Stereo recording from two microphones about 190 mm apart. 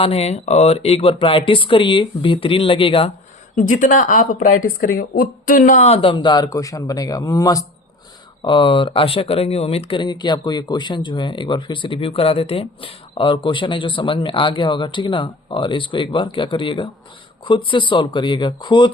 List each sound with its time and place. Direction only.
0.0 s speech: 30° left (ahead or behind)
3.5 s speech: 45° left (ahead or behind); by 18.9 s 25° left (ahead or behind)